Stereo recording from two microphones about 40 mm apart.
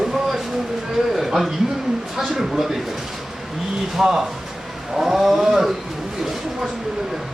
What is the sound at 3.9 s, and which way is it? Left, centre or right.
Speech, centre.